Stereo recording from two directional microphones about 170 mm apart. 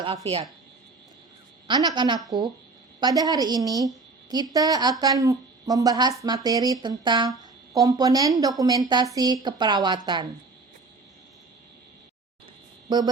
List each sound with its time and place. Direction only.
0.0 s speech: 35° right (ahead or behind)
1.6 s a woman's voice: 25° right (ahead or behind)
12.9 s a woman's voice: 25° right (ahead or behind)